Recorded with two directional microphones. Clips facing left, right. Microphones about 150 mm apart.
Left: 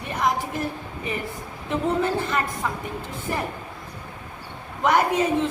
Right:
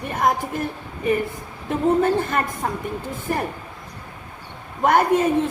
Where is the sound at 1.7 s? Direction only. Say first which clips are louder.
Right 5 dB; 50° right (ahead or behind).